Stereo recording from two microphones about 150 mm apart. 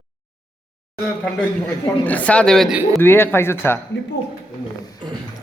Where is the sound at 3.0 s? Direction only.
15° left (ahead or behind).